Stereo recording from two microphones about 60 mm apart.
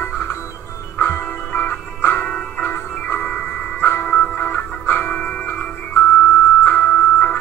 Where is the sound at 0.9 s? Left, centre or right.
Left.